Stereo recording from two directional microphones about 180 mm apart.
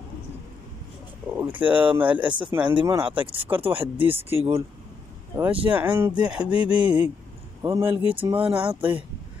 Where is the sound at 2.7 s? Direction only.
25° right (ahead or behind).